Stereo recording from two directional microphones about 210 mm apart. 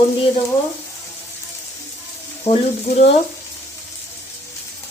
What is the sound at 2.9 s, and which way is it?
Speech, 45° left (ahead or behind).